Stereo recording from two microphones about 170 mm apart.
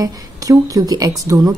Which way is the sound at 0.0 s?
20° right (ahead or behind).